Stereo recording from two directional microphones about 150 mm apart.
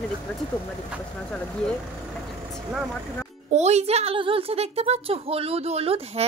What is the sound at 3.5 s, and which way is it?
A woman's voice, 45° right (ahead or behind).